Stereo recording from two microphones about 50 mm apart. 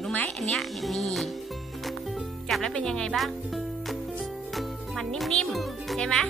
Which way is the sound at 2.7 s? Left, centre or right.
Centre.